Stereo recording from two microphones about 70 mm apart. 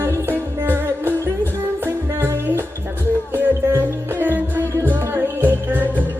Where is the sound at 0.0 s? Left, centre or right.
Right.